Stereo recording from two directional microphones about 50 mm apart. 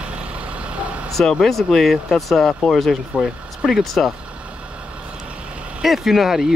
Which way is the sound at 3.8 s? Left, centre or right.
Centre.